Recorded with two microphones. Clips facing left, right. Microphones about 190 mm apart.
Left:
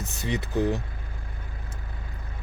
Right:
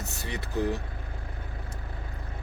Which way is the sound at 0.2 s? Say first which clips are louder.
Left 4 dB; 20° left (ahead or behind).